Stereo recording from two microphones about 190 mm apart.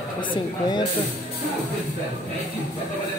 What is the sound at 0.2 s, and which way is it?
Speech, 25° left (ahead or behind).